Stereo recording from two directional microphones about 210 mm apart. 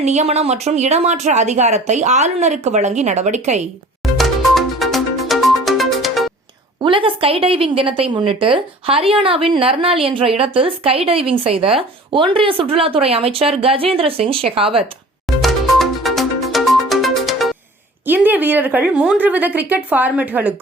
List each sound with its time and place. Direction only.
0.0 s a woman's voice: 35° right (ahead or behind)
4.2 s music: centre (ahead or behind)
6.8 s a woman's voice: 25° right (ahead or behind)
15.4 s music: centre (ahead or behind)
18.0 s a woman's voice: 10° right (ahead or behind)